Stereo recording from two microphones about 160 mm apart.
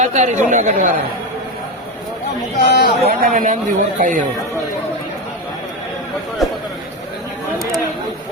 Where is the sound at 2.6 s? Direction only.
90° left.